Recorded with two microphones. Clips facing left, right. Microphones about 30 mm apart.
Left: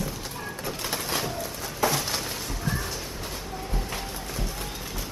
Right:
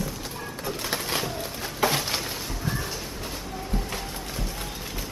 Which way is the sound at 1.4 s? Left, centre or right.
Right.